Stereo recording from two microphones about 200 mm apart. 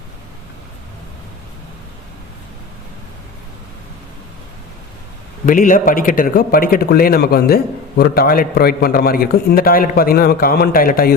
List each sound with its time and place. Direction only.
5.5 s a man's voice: 40° left (ahead or behind)